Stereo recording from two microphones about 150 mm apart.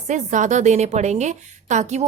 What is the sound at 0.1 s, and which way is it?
A woman's voice, 55° right (ahead or behind).